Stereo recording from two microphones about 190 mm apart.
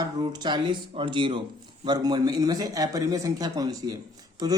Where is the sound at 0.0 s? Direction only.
20° right (ahead or behind).